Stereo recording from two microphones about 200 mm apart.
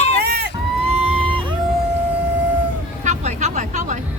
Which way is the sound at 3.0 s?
35° right (ahead or behind).